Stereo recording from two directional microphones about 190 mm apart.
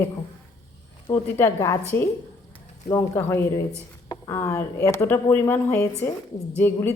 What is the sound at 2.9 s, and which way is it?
Speech, 15° left (ahead or behind).